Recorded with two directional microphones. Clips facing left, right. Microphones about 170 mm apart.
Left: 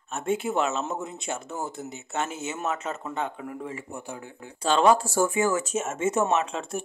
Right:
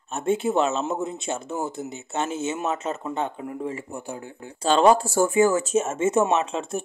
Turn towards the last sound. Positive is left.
turn(degrees=-25)  # may be behind; listen again after turning